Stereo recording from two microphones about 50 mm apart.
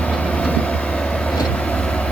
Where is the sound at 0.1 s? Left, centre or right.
Left.